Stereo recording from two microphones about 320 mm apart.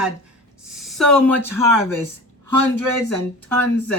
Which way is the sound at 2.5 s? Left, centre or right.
Right.